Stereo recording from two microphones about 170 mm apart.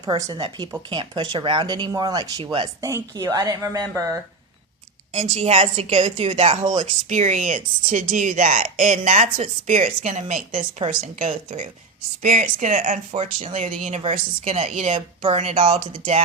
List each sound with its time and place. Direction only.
0.0 s speech: 20° right (ahead or behind)
2.8 s speech: 20° right (ahead or behind)
5.2 s a woman's voice: 40° right (ahead or behind)
10.8 s a woman's voice: 40° right (ahead or behind)